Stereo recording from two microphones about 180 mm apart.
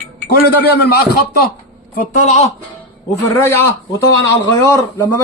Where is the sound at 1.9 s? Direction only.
45° left (ahead or behind).